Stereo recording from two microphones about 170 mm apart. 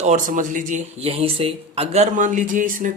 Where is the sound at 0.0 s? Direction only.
45° right (ahead or behind).